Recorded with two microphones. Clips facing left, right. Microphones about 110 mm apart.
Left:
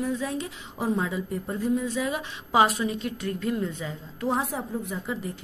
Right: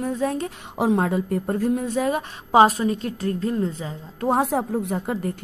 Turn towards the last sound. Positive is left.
turn(degrees=-50)  # may be behind; listen again after turning